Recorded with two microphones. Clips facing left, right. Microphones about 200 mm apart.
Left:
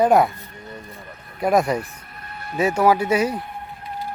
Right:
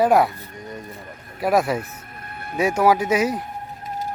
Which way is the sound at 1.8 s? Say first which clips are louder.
Even; 50° right (ahead or behind).